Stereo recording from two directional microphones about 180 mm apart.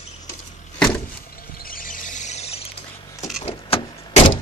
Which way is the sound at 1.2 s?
55° left (ahead or behind).